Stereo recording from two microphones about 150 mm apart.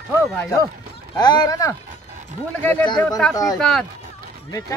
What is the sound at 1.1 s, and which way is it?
Speech, 30° left (ahead or behind).